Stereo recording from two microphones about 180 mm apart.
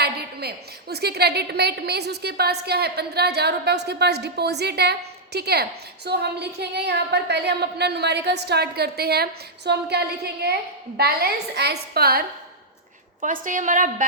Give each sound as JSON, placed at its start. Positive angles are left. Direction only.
{"t": 0.0, "sound": "a woman's voice", "side_deg": -60}
{"t": 13.2, "sound": "a woman's voice", "side_deg": -45}